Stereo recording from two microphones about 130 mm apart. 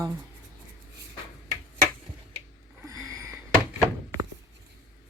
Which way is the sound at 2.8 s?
25° right (ahead or behind).